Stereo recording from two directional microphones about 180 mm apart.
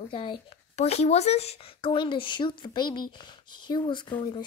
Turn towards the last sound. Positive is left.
turn(degrees=20)  # may be behind; listen again after turning